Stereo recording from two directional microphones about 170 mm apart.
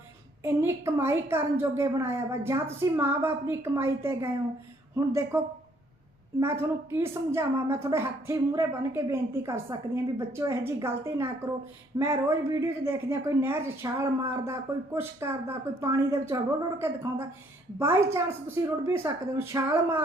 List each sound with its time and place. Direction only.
0.4 s a woman's voice: 15° right (ahead or behind)
6.4 s a woman's voice: 15° right (ahead or behind)